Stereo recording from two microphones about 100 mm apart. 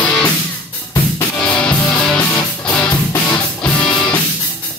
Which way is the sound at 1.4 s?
5° left (ahead or behind).